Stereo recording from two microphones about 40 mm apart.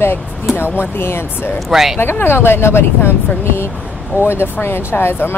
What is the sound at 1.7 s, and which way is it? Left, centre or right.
Speech, centre.